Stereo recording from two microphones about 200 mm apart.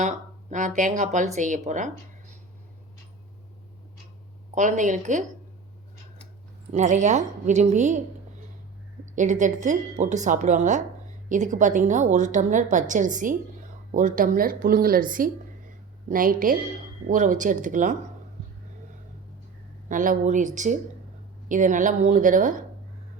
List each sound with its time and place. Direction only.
0.5 s a woman's voice: 40° right (ahead or behind)
4.5 s a woman's voice: 40° right (ahead or behind)
6.7 s a woman's voice: 35° right (ahead or behind)
9.1 s a woman's voice: 40° right (ahead or behind)
16.0 s a woman's voice: 45° right (ahead or behind)
19.9 s a woman's voice: 40° right (ahead or behind)